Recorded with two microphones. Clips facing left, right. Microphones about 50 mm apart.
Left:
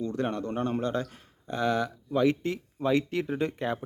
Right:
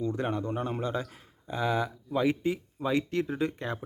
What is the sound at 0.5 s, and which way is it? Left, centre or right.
Speech, centre.